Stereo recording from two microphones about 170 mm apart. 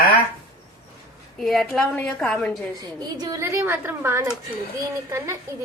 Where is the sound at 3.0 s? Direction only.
20° right (ahead or behind).